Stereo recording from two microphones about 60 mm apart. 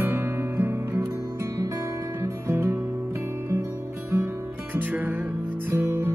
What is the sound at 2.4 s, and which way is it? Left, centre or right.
Music, right.